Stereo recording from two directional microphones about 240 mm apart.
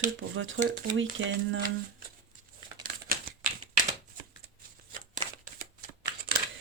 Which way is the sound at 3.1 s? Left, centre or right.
Right.